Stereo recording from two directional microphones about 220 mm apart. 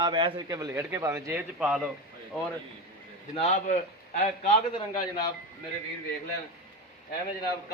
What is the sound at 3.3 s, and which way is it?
A man's voice, 30° left (ahead or behind).